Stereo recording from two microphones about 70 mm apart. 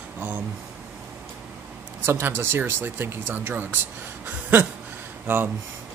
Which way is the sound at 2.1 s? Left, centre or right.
Right.